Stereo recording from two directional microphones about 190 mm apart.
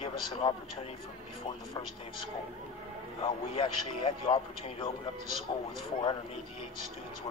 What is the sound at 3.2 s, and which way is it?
A man's voice, 30° left (ahead or behind).